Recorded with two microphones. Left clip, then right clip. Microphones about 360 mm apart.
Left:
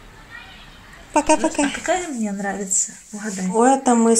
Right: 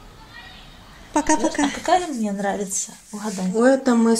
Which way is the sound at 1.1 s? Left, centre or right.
Centre.